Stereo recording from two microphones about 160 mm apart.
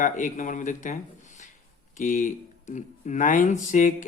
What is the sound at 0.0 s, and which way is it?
Speech, 55° left (ahead or behind).